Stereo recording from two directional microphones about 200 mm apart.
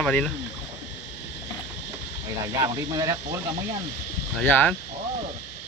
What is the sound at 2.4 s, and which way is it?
Speech, 15° right (ahead or behind).